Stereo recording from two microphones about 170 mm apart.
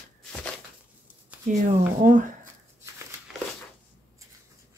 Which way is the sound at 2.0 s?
50° right (ahead or behind).